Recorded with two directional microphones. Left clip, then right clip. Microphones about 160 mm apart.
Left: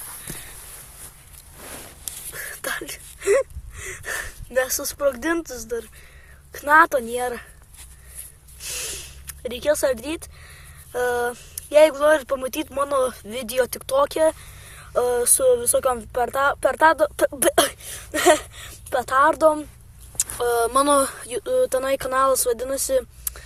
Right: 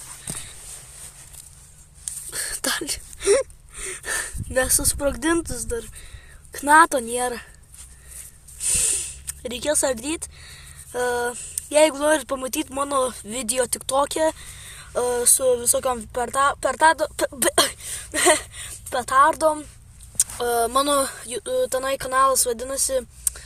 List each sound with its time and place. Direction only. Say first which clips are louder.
2.3 s gasp: right 3 dB; 40° right (ahead or behind)
6.5 s speech: even; 35° right (ahead or behind)
8.6 s speech: right 5 dB; 40° right (ahead or behind); by 23.4 s 15° right (ahead or behind)